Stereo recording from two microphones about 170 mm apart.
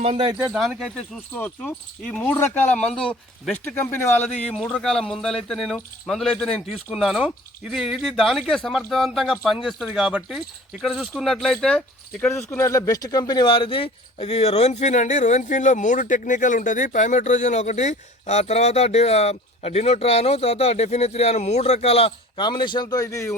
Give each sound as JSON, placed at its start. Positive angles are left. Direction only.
{"t": 0.0, "sound": "speech", "side_deg": -30}
{"t": 0.5, "sound": "a man's voice", "side_deg": -5}